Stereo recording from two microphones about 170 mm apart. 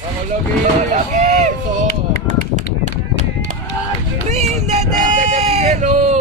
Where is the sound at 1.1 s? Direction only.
45° right (ahead or behind).